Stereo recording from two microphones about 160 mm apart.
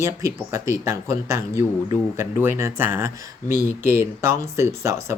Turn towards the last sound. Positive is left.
turn(degrees=-15)  # may be behind; listen again after turning